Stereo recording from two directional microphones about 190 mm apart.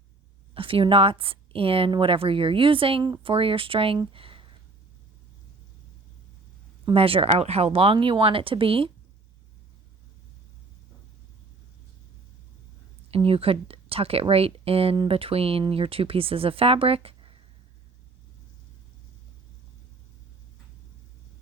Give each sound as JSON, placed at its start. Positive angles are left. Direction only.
{"t": 0.5, "sound": "speech", "side_deg": -30}
{"t": 6.8, "sound": "speech", "side_deg": -30}
{"t": 13.1, "sound": "speech", "side_deg": -30}